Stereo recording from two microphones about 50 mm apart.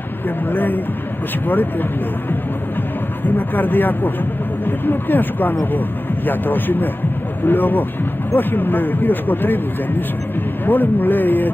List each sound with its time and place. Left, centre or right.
0.5 s speech: left
3.3 s speech: left